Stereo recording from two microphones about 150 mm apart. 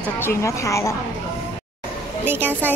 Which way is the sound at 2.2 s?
15° right (ahead or behind).